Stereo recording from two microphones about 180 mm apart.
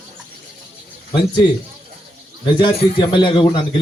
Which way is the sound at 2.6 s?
30° left (ahead or behind).